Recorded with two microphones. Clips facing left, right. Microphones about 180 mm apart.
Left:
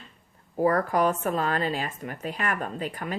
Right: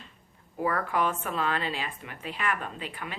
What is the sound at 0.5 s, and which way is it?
A woman's voice, 40° left (ahead or behind).